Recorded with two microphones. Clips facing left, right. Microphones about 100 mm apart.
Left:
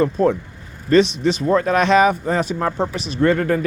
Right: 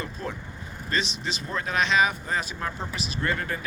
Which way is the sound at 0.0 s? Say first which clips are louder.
Left 17 dB; 60° left (ahead or behind).